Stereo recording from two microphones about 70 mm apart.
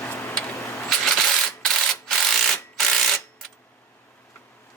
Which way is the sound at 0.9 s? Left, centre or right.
Centre.